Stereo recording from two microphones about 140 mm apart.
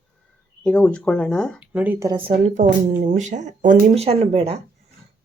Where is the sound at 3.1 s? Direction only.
60° right (ahead or behind).